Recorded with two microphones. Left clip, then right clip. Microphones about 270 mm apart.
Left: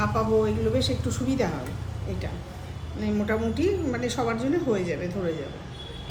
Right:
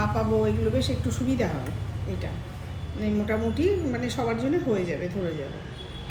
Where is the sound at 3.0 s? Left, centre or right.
Centre.